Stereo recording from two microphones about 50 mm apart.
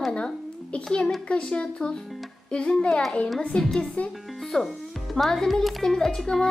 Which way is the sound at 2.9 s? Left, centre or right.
Centre.